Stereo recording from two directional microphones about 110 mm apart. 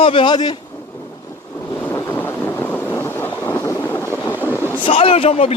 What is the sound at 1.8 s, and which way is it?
Wind noise, 25° left (ahead or behind).